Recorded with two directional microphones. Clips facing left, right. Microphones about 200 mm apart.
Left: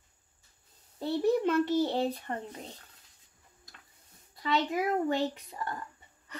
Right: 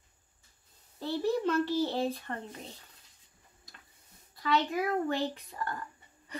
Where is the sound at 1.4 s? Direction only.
20° left (ahead or behind).